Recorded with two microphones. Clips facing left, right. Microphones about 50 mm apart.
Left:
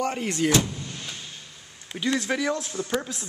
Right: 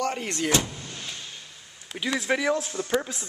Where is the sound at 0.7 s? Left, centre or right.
Centre.